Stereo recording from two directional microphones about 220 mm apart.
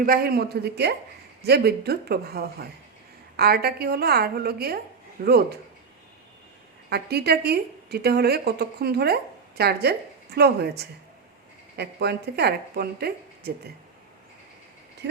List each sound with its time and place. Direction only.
0.0 s a woman's voice: 40° right (ahead or behind)
6.9 s a woman's voice: 45° right (ahead or behind)
15.0 s speech: 50° right (ahead or behind)